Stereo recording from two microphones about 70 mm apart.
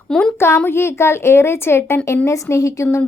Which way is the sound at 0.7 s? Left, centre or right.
Left.